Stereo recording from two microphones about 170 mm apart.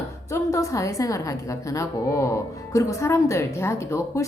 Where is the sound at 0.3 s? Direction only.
20° left (ahead or behind).